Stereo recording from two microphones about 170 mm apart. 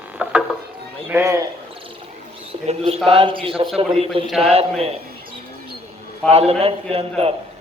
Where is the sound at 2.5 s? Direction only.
35° right (ahead or behind).